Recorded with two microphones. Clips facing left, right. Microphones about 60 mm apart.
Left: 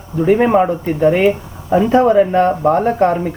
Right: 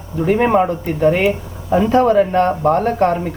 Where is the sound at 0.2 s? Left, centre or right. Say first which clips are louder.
Left 2 dB; centre.